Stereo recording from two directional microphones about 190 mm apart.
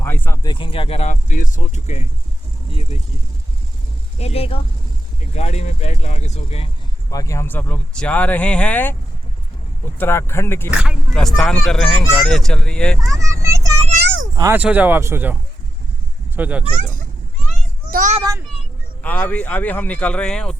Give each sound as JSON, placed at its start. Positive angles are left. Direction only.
{"t": 0.0, "sound": "speech", "side_deg": 10}
{"t": 0.5, "sound": "speech", "side_deg": 25}
{"t": 4.2, "sound": "speech", "side_deg": 30}
{"t": 7.1, "sound": "speech", "side_deg": 15}
{"t": 10.0, "sound": "speech", "side_deg": 10}
{"t": 10.7, "sound": "speech", "side_deg": -5}
{"t": 13.1, "sound": "vehicle", "side_deg": -15}
{"t": 14.0, "sound": "a sound", "side_deg": -75}
{"t": 14.3, "sound": "speech", "side_deg": -15}
{"t": 17.9, "sound": "a child's voice", "side_deg": -40}
{"t": 18.2, "sound": "a child's voice", "side_deg": -20}
{"t": 19.0, "sound": "speech", "side_deg": 10}